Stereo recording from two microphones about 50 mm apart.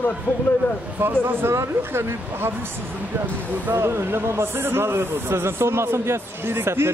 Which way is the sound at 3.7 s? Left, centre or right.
Right.